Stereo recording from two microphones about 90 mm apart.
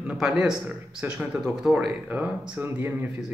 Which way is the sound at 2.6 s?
25° right (ahead or behind).